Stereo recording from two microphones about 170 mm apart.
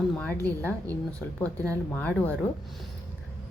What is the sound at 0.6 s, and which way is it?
Speech, 20° right (ahead or behind).